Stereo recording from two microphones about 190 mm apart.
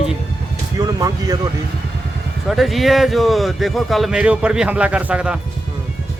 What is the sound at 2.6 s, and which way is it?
Speech, centre (ahead or behind).